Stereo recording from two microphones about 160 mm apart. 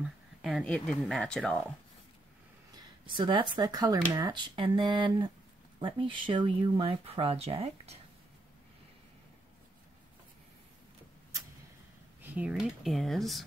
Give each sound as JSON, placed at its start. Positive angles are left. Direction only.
{"t": 0.4, "sound": "speech", "side_deg": -5}
{"t": 2.7, "sound": "speech", "side_deg": -30}
{"t": 12.2, "sound": "speech", "side_deg": -10}